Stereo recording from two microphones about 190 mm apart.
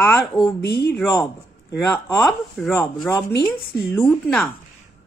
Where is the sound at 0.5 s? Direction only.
60° left (ahead or behind).